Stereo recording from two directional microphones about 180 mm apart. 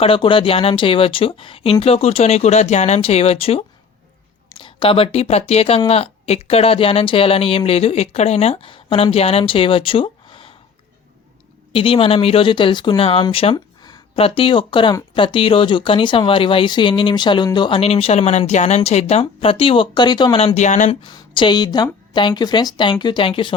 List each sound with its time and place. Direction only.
0.0 s speech: 30° left (ahead or behind)
11.7 s speech: 30° left (ahead or behind)
21.0 s speech: 25° left (ahead or behind)